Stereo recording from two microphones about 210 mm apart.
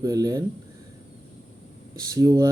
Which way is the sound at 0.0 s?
15° right (ahead or behind).